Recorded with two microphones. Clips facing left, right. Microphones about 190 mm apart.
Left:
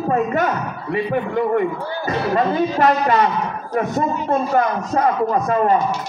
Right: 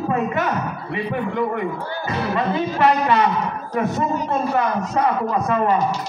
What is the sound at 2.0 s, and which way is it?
A man's voice, 40° left (ahead or behind).